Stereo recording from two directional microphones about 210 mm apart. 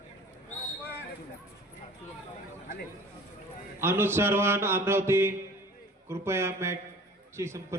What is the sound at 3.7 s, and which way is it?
A man's voice, 10° right (ahead or behind).